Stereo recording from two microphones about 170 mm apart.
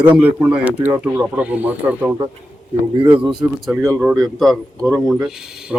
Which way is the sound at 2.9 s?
30° right (ahead or behind).